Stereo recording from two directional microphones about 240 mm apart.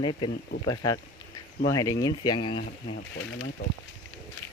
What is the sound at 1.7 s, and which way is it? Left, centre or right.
Speech, centre.